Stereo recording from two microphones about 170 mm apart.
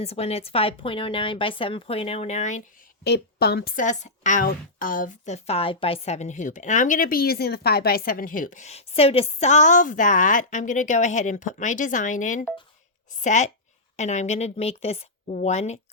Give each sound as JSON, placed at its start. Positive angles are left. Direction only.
{"t": 0.0, "sound": "speech", "side_deg": 35}
{"t": 3.0, "sound": "speech", "side_deg": 70}
{"t": 3.8, "sound": "a woman's voice", "side_deg": 45}